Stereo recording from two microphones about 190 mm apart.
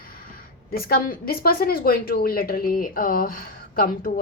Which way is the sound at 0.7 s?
55° left (ahead or behind).